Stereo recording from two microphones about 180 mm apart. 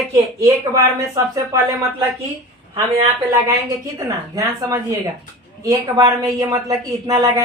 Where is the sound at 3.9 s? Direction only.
20° right (ahead or behind).